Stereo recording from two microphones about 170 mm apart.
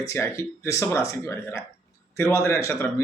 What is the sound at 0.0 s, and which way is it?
A man's voice, 15° left (ahead or behind).